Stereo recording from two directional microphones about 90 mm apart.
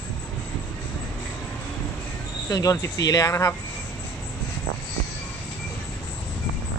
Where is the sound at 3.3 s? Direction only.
30° left (ahead or behind).